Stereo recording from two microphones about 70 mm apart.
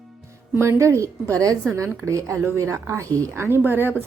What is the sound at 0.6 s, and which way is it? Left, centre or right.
A woman's voice, right.